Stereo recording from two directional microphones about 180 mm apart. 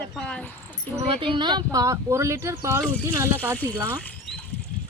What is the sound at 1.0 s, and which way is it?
Speech, 30° right (ahead or behind).